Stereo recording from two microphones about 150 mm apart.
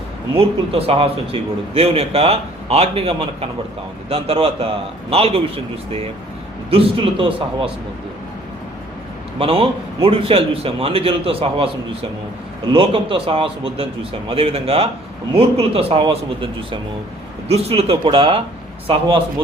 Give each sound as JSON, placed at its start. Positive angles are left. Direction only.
{"t": 0.3, "sound": "a man's voice", "side_deg": -40}
{"t": 6.7, "sound": "a man's voice", "side_deg": -40}
{"t": 9.4, "sound": "a man's voice", "side_deg": -35}
{"t": 12.7, "sound": "a man's voice", "side_deg": -35}